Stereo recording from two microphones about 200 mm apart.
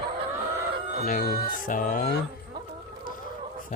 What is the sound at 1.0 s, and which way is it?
Speech, 45° left (ahead or behind).